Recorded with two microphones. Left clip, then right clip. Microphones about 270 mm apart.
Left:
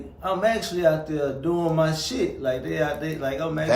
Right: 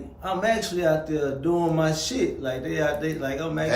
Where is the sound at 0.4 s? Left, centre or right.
Centre.